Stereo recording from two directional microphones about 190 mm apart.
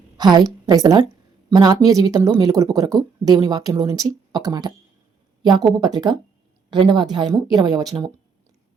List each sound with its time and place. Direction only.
0.2 s a woman's voice: 20° right (ahead or behind)